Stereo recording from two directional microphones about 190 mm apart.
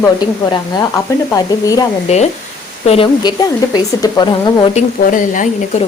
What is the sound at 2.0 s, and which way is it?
Speech, 35° left (ahead or behind).